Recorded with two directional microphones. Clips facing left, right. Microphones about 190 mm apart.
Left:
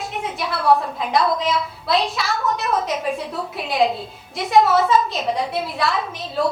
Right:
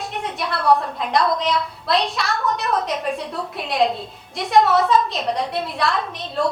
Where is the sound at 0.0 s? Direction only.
Centre (ahead or behind).